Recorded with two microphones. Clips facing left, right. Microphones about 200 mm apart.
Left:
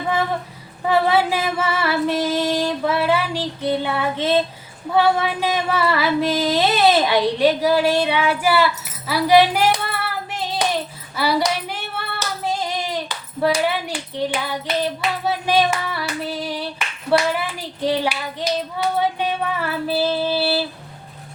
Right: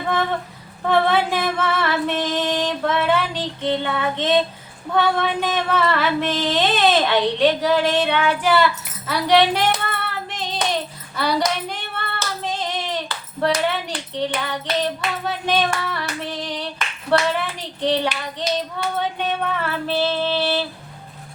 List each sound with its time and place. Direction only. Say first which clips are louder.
0.9 s female singing: left 1 dB; 10° left (ahead or behind)
15.4 s clapping: left 2 dB; 10° left (ahead or behind)
18.9 s female singing: left 1 dB; 10° left (ahead or behind)